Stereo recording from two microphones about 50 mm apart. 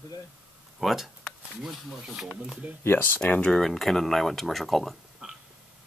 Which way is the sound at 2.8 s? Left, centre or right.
Left.